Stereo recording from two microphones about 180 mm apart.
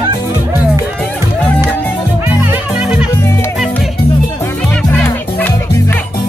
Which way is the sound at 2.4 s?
5° right (ahead or behind).